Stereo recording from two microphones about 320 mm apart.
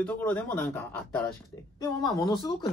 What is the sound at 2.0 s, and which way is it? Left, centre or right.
Speech, centre.